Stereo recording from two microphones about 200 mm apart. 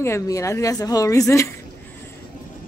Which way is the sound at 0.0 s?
15° left (ahead or behind).